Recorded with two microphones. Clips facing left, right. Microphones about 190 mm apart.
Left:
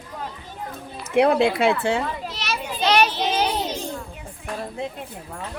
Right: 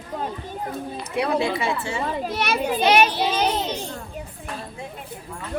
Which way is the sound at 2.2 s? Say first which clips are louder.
Right 6 dB; 55° right (ahead or behind).